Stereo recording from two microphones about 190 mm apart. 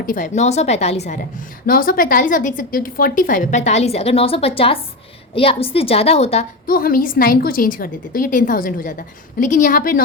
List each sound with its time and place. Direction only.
0.0 s a woman's voice: 45° left (ahead or behind)
1.6 s a woman's voice: 50° left (ahead or behind); by 6.4 s 35° left (ahead or behind)
6.7 s a woman's voice: 50° left (ahead or behind)